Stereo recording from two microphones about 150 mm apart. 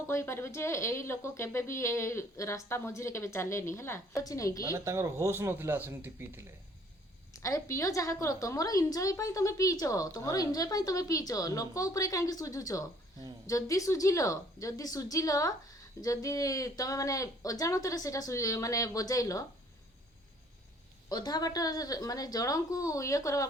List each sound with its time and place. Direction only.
0.1 s speech: 15° left (ahead or behind)
4.7 s speech: 20° right (ahead or behind)
7.3 s speech: 20° left (ahead or behind)
21.1 s speech: 25° left (ahead or behind)